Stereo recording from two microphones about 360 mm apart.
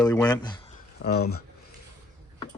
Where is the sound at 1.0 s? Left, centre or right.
Left.